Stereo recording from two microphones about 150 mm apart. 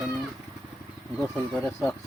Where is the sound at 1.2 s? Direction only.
5° left (ahead or behind).